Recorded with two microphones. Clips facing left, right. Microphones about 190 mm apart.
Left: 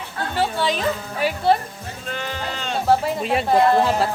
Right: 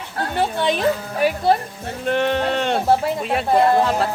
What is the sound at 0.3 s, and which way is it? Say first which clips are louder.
Speech: right 1 dB; 20° right (ahead or behind).